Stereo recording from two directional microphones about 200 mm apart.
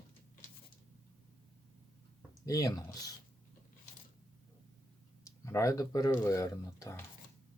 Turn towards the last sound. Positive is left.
turn(degrees=15)  # may be behind; listen again after turning